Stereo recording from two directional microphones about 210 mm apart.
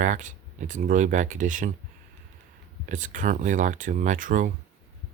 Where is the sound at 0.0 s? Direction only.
35° right (ahead or behind).